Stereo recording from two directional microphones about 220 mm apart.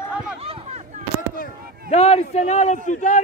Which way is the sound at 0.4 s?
25° right (ahead or behind).